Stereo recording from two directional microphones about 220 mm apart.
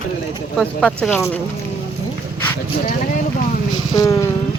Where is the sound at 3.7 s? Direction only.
15° left (ahead or behind).